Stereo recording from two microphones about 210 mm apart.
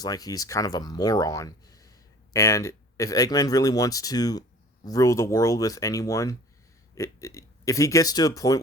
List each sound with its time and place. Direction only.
0.0 s speech: 15° left (ahead or behind)